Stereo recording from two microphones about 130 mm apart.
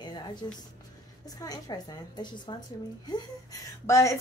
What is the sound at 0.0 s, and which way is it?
Music, 35° left (ahead or behind).